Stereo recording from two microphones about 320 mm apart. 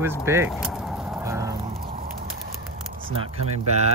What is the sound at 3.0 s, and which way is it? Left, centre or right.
Speech, centre.